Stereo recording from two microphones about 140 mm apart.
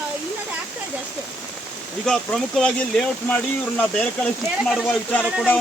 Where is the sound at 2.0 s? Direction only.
5° left (ahead or behind).